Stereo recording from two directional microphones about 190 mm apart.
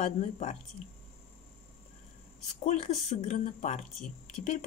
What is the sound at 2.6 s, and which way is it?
A woman's voice, 35° left (ahead or behind).